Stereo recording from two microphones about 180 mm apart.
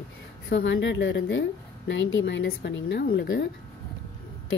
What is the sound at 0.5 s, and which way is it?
A woman's voice, 80° left.